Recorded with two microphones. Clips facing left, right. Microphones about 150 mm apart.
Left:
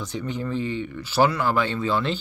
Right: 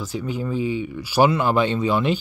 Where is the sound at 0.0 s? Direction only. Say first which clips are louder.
Right 2 dB; 5° right (ahead or behind).